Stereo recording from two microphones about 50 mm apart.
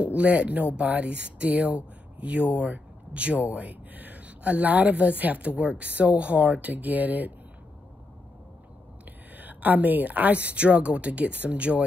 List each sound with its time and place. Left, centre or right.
0.0 s speech: right
9.4 s speech: right